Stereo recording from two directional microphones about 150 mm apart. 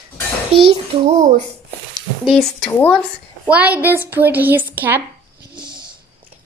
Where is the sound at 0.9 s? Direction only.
45° right (ahead or behind).